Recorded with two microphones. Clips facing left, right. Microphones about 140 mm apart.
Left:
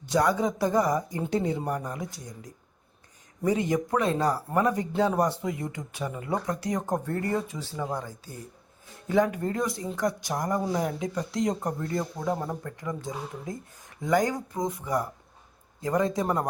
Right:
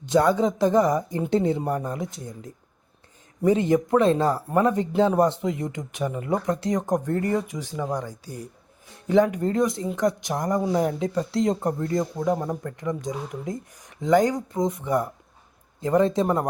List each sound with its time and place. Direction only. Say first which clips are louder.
0.0 s speech: right 4 dB; 25° right (ahead or behind)